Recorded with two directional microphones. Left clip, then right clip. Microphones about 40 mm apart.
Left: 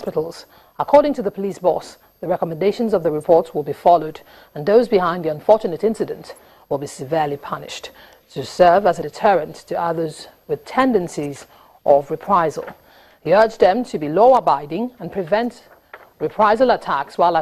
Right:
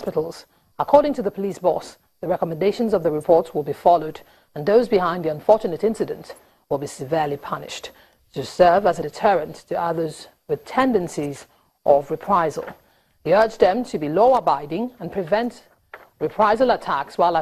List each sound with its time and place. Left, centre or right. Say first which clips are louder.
0.0 s speech: left 1 dB; left